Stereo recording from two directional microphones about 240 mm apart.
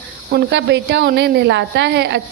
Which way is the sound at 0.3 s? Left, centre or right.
Right.